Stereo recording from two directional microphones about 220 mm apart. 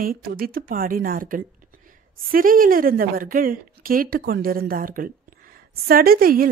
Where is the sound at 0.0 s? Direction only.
40° right (ahead or behind).